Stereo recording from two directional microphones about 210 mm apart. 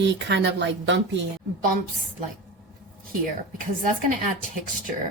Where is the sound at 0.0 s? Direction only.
55° right (ahead or behind).